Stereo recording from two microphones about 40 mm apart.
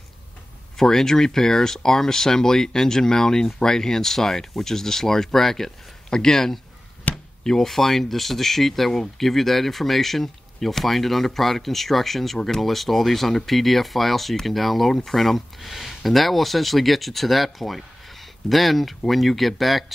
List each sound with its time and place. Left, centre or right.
0.7 s speech: centre
7.1 s a sound: left
7.4 s speech: centre